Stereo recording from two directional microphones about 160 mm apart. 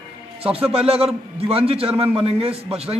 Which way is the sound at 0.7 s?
40° right (ahead or behind).